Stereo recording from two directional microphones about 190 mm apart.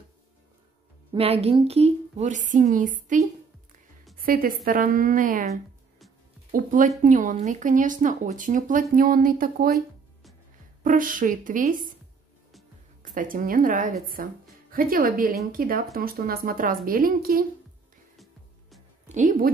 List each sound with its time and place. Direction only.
1.1 s a woman's voice: 30° right (ahead or behind)
6.5 s a woman's voice: 45° right (ahead or behind)
10.8 s a woman's voice: 45° right (ahead or behind)
13.1 s a woman's voice: 45° right (ahead or behind)
18.1 s music: centre (ahead or behind)
19.0 s speech: 40° right (ahead or behind)